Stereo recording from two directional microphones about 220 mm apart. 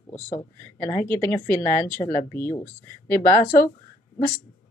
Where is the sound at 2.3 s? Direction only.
10° left (ahead or behind).